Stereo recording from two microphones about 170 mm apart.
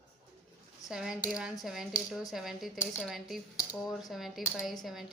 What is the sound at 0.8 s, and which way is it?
Speech, 5° right (ahead or behind).